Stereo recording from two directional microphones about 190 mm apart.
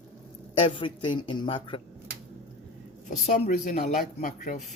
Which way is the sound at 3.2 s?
40° left (ahead or behind).